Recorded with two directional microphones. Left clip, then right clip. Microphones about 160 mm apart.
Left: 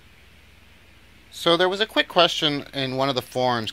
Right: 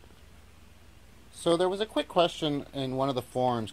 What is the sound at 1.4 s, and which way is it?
Speech, 5° left (ahead or behind).